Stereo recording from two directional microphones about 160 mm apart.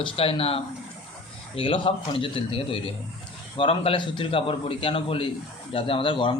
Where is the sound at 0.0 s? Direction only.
35° left (ahead or behind).